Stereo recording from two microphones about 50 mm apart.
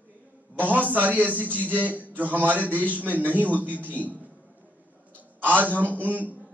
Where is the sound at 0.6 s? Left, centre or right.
Right.